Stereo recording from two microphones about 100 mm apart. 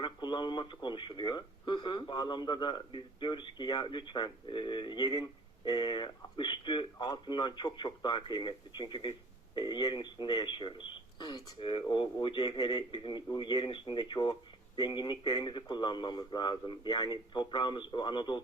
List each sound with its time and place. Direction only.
0.0 s speech: 50° left (ahead or behind)